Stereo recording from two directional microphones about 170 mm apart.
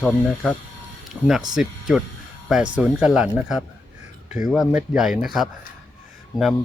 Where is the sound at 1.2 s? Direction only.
10° right (ahead or behind).